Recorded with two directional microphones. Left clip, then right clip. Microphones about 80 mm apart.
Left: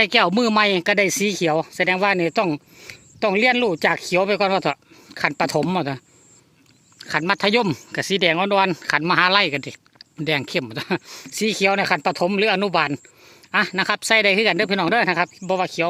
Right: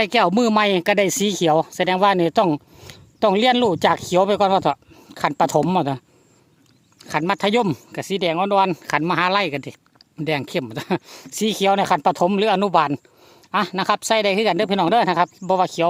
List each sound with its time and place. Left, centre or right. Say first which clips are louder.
0.0 s speech: even; right
5.4 s speech: right 6 dB; right
7.0 s speech: even; right
7.9 s speech: left 3 dB; centre; by 11.9 s right
12.0 s speech: right 2 dB; right
15.4 s speech: right 3 dB; right